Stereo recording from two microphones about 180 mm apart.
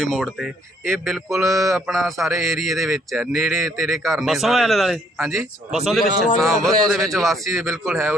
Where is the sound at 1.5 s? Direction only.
20° right (ahead or behind).